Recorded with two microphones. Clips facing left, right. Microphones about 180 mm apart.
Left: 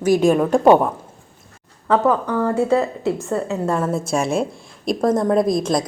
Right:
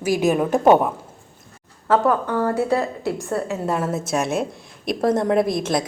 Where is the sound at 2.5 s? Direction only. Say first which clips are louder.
Left 3 dB; 20° left (ahead or behind).